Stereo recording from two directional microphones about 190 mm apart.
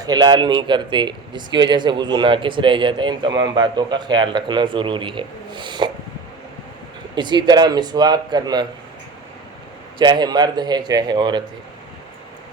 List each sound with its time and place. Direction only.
0.0 s speech: 20° right (ahead or behind)
7.2 s speech: 25° right (ahead or behind)
10.0 s speech: 20° right (ahead or behind)